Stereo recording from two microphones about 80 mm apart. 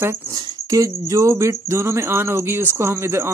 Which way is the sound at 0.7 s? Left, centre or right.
Right.